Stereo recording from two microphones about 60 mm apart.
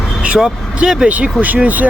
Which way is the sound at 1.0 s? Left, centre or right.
Right.